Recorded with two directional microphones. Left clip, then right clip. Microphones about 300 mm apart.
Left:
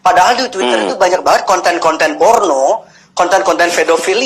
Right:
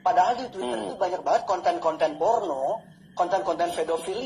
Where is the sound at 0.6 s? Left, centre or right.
Left.